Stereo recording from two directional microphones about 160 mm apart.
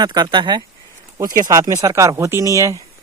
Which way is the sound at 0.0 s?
25° right (ahead or behind).